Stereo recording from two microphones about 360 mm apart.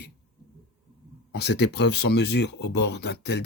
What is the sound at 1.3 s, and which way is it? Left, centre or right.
Speech, left.